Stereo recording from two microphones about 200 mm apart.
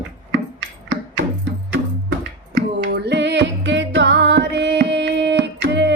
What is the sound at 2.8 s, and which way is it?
Music, 55° right (ahead or behind).